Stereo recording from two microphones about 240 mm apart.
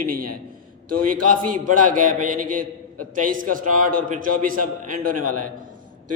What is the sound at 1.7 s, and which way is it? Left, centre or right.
A man's voice, right.